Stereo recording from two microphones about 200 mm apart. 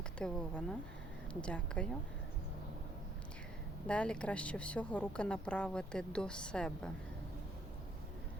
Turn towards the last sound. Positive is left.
turn(degrees=5)  # may be behind; listen again after turning